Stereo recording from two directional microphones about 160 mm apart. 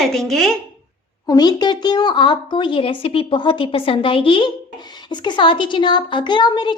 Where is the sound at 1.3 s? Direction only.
25° left (ahead or behind).